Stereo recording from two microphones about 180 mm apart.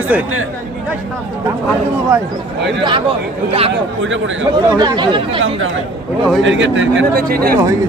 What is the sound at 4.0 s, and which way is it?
Speech, 90° right.